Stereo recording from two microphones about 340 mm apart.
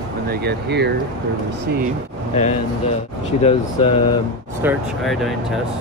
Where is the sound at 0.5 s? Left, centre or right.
Right.